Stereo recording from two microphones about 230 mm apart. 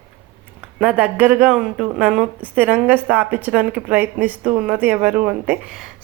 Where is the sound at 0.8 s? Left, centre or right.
Centre.